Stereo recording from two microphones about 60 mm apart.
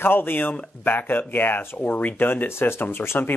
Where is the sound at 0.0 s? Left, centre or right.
Left.